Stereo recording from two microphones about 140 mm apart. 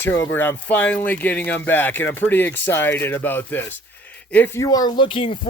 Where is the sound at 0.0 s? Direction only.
15° left (ahead or behind).